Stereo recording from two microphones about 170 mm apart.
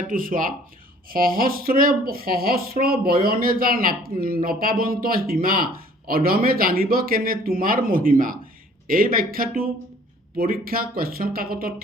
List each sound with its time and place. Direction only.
0.1 s speech: 55° right (ahead or behind)